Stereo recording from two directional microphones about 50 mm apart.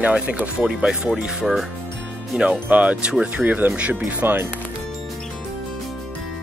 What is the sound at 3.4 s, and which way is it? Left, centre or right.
Speech, right.